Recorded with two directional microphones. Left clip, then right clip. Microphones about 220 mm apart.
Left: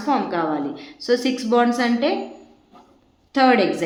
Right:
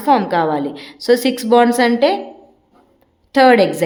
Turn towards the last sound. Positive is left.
turn(degrees=-45)  # may be behind; listen again after turning